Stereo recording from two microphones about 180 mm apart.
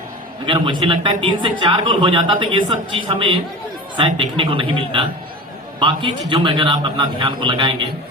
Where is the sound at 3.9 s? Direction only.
30° right (ahead or behind).